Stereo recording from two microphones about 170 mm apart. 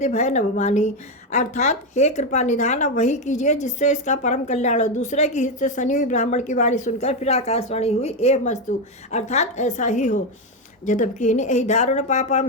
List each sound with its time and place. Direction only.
0.0 s speech: 45° left (ahead or behind)